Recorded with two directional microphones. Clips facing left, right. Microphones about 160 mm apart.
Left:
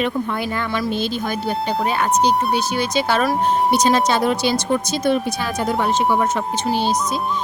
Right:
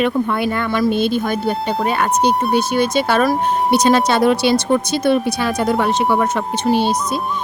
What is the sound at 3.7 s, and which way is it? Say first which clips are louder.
Speech: right 3 dB; 65° right (ahead or behind).